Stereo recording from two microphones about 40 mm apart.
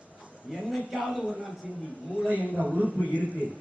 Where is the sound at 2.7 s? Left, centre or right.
Right.